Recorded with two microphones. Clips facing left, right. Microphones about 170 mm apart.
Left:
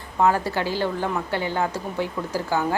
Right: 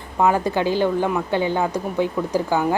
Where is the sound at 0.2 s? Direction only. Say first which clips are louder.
Right 2 dB; 15° right (ahead or behind).